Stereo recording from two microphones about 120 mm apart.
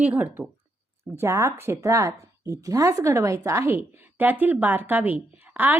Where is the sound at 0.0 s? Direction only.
15° right (ahead or behind).